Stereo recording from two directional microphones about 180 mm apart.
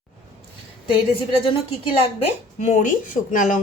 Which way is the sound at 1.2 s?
30° left (ahead or behind).